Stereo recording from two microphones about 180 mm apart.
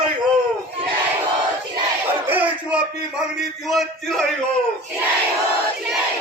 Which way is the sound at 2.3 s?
10° right (ahead or behind).